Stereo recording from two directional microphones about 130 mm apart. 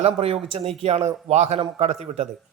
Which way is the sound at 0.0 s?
50° right (ahead or behind).